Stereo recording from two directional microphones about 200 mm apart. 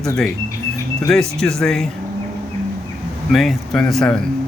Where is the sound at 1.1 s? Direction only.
5° left (ahead or behind).